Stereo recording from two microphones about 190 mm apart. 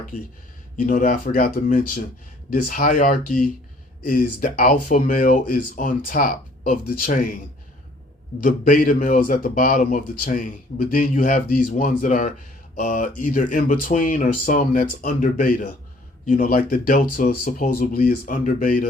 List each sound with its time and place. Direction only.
0.8 s a man's voice: 45° left (ahead or behind)
8.4 s a man's voice: 45° left (ahead or behind)